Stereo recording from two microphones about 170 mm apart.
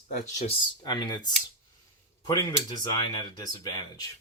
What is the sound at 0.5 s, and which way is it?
Speech, 25° left (ahead or behind).